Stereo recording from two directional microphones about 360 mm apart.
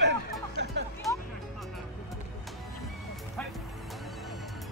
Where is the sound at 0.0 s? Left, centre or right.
Right.